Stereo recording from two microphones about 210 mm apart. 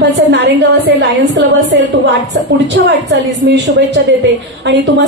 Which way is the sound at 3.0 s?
55° right (ahead or behind).